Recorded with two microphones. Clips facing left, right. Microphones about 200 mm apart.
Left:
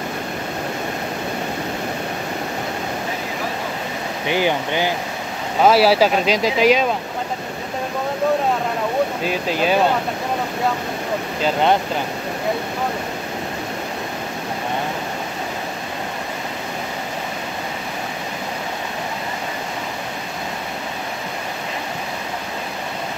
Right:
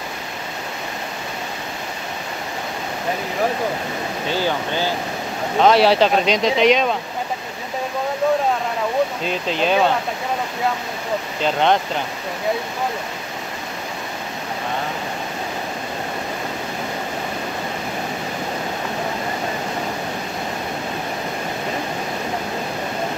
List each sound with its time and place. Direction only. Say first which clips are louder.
4.3 s speech: left 3 dB; 15° left (ahead or behind)
5.6 s speech: even; 5° left (ahead or behind)
9.2 s speech: left 1 dB; 5° left (ahead or behind)
11.4 s speech: even; 5° left (ahead or behind)